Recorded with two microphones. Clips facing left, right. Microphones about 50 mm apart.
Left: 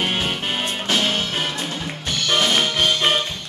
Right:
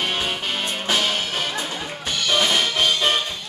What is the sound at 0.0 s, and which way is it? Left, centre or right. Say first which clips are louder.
Music: left 2 dB; left.